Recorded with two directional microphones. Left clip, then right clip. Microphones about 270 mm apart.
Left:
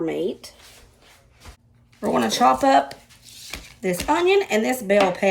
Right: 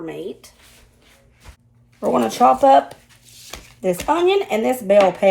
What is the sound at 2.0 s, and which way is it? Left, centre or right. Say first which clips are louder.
Speech: right 3 dB; centre.